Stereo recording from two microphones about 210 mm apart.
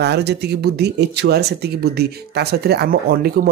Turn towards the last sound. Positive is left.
turn(degrees=-45)  # may be behind; listen again after turning